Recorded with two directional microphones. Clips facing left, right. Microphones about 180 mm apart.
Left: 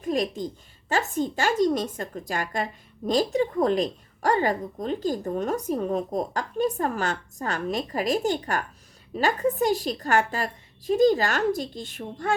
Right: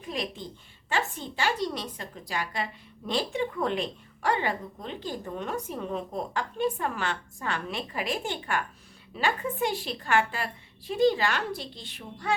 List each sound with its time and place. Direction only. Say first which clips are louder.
0.0 s a woman's voice: left 8 dB; 45° left (ahead or behind)